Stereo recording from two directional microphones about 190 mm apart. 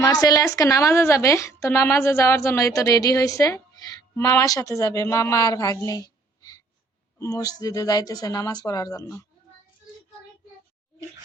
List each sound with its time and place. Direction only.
0.0 s a woman's voice: 20° left (ahead or behind)